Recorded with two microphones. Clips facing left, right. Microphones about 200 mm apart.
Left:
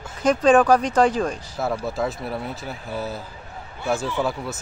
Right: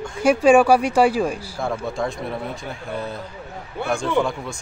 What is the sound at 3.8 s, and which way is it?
Speech, 60° right (ahead or behind).